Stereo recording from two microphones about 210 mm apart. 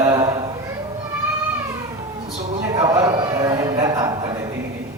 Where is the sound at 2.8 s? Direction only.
15° right (ahead or behind).